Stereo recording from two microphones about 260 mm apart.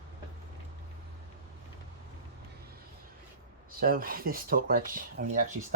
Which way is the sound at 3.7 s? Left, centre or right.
Right.